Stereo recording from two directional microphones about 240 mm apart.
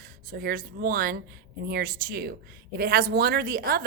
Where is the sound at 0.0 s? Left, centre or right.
Right.